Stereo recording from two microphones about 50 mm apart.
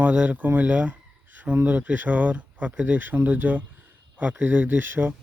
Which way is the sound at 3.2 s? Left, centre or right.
Right.